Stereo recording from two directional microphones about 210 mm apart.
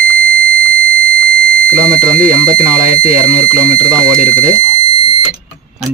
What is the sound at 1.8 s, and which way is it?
Speech, 5° left (ahead or behind).